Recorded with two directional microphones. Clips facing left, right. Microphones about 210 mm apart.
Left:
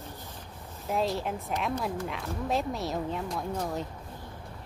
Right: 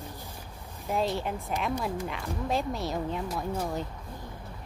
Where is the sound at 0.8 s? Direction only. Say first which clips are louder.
Even; centre (ahead or behind).